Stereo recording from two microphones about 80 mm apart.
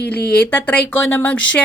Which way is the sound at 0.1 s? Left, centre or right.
Centre.